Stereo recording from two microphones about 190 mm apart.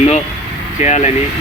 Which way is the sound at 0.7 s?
35° left (ahead or behind).